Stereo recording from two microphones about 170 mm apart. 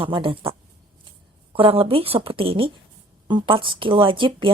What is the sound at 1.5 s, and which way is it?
A woman's voice, 30° right (ahead or behind).